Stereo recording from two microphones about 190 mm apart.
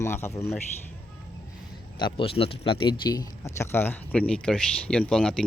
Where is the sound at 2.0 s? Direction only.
25° left (ahead or behind).